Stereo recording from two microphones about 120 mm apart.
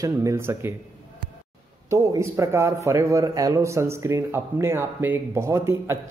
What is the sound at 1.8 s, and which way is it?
A man's voice, 25° right (ahead or behind).